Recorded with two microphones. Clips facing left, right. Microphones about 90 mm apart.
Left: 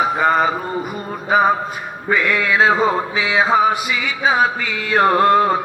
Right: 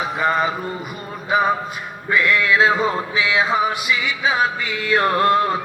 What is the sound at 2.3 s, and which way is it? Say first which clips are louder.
A man's voice: left 1 dB; 40° left (ahead or behind).